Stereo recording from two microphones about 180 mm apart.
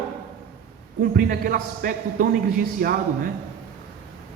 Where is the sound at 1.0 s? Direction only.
55° right (ahead or behind).